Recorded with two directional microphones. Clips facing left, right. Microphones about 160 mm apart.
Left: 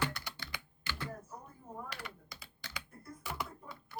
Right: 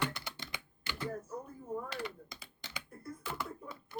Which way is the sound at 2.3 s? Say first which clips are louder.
Right 1 dB; 20° right (ahead or behind).